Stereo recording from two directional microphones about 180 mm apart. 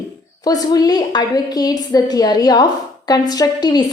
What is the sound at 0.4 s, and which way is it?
A woman's voice, 20° left (ahead or behind).